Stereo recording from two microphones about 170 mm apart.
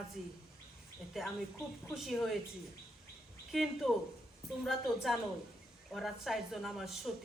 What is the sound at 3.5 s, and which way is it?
Speech, centre (ahead or behind).